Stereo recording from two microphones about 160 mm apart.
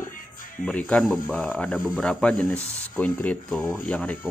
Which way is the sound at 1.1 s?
5° right (ahead or behind).